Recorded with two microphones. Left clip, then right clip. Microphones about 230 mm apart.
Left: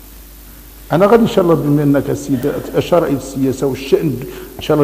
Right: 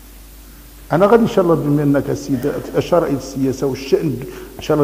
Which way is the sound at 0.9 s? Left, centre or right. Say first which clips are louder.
Left 2 dB; left.